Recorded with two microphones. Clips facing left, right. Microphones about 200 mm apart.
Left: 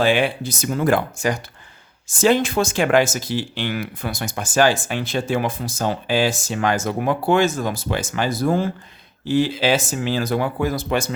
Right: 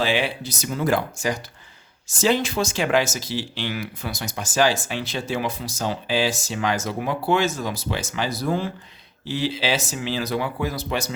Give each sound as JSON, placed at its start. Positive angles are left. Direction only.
{"t": 0.0, "sound": "speech", "side_deg": 50}